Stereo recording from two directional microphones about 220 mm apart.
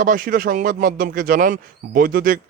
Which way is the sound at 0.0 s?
40° right (ahead or behind).